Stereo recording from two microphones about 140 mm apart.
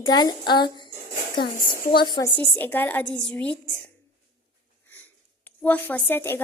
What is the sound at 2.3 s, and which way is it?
A woman's voice, 10° left (ahead or behind).